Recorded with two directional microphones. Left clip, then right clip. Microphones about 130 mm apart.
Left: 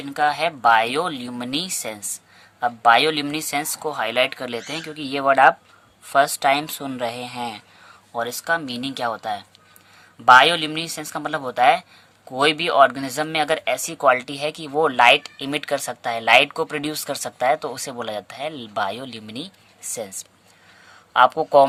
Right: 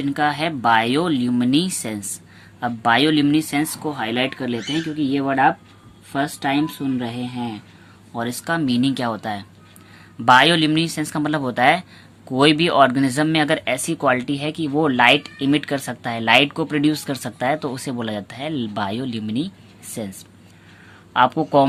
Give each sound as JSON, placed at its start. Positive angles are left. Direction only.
{"t": 0.0, "sound": "speech", "side_deg": 40}
{"t": 8.1, "sound": "a woman's voice", "side_deg": 40}